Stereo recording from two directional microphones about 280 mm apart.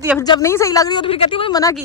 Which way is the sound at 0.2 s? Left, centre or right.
Centre.